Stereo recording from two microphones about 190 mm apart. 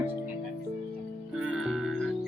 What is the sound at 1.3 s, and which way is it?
Music, 5° right (ahead or behind).